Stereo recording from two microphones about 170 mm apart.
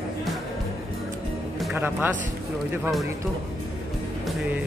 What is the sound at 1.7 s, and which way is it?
Speech, 10° right (ahead or behind).